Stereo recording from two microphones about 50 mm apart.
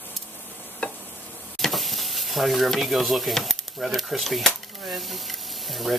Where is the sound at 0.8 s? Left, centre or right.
Left.